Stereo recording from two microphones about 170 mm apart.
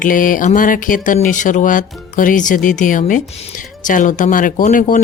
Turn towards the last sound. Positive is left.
turn(degrees=50)  # may be behind; listen again after turning